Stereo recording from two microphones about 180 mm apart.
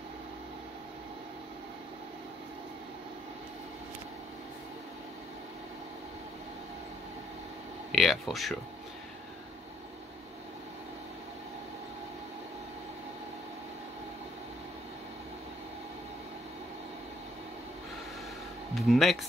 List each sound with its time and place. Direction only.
7.9 s speech: centre (ahead or behind)
18.8 s speech: centre (ahead or behind)